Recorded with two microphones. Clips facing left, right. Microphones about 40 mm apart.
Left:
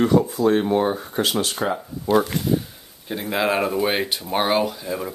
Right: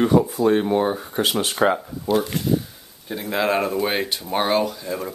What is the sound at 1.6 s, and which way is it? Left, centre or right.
Speech, right.